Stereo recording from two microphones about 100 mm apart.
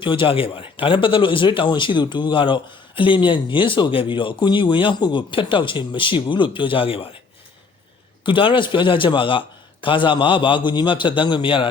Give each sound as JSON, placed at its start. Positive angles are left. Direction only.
{"t": 0.0, "sound": "a man's voice", "side_deg": 60}
{"t": 8.2, "sound": "a man's voice", "side_deg": 55}